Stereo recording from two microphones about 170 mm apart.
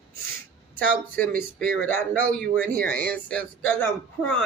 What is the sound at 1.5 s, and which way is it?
Speech, 10° left (ahead or behind).